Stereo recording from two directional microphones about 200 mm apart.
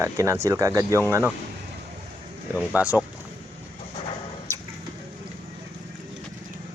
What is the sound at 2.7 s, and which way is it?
Speech, 5° right (ahead or behind).